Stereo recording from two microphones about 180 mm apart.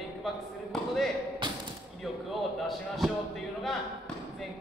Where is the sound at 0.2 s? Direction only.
Centre (ahead or behind).